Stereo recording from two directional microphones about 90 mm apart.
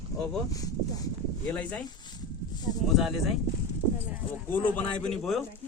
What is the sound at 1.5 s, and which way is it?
Speech, 15° left (ahead or behind).